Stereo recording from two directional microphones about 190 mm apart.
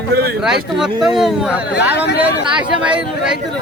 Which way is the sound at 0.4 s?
5° right (ahead or behind).